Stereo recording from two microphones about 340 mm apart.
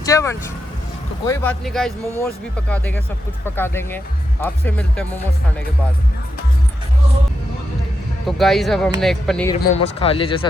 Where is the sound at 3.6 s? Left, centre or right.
Centre.